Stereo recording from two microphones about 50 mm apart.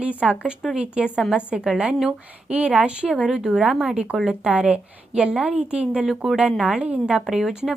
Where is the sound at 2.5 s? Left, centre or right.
Right.